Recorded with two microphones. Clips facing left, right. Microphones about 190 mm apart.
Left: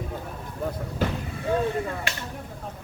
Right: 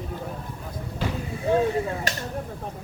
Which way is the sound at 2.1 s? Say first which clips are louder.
Right 3 dB; 40° right (ahead or behind).